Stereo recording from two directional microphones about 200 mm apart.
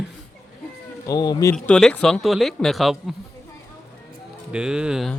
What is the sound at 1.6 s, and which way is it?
Speech, 5° left (ahead or behind).